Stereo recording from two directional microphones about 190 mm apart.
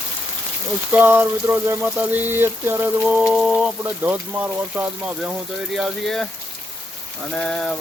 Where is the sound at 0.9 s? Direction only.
10° right (ahead or behind).